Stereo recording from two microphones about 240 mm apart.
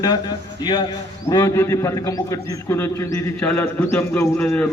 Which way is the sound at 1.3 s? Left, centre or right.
Centre.